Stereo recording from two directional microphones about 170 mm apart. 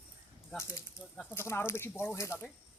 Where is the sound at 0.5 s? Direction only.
15° left (ahead or behind).